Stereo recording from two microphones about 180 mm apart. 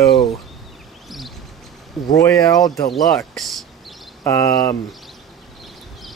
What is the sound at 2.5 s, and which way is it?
Speech, 20° left (ahead or behind).